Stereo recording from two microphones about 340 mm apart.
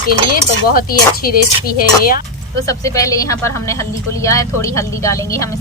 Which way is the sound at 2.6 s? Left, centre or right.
Centre.